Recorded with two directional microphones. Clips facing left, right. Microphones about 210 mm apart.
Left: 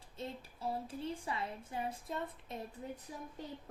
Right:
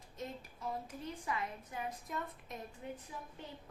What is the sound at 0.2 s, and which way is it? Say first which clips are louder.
A woman's voice: left 1 dB; 30° left (ahead or behind).